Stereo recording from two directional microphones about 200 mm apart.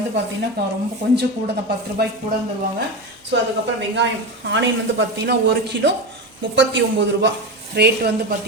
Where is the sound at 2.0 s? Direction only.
50° right (ahead or behind).